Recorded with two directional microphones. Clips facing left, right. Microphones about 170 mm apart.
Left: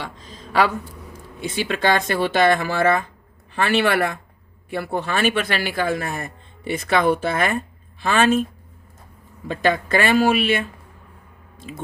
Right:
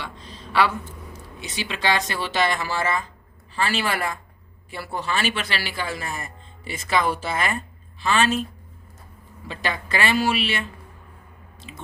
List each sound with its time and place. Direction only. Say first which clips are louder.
0.0 s a sound: left 3 dB; 45° left (ahead or behind)
1.4 s speech: left 7 dB; 50° left (ahead or behind)
9.5 s speech: left 8 dB; 50° left (ahead or behind)